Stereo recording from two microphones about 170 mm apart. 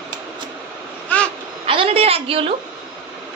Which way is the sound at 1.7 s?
35° right (ahead or behind).